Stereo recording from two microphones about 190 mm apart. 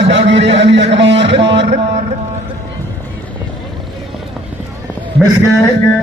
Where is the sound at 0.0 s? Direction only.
70° right (ahead or behind).